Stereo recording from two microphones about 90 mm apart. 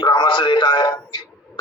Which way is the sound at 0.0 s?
60° left (ahead or behind).